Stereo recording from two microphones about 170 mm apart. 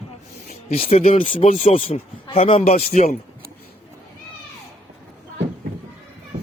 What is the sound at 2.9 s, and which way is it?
Speech, 55° left (ahead or behind).